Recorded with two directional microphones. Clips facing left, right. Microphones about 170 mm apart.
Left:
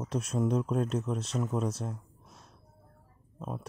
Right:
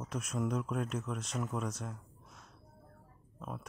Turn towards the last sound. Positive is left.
turn(degrees=25)  # may be behind; listen again after turning